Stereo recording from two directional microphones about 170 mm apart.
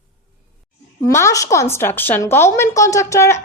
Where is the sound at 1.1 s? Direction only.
20° left (ahead or behind).